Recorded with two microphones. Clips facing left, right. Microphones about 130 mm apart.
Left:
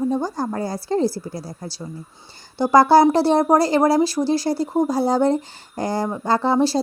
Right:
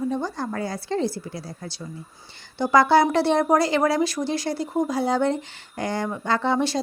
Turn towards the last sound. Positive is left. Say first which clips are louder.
# left 4 dB
turn(degrees=35)  # may be behind; listen again after turning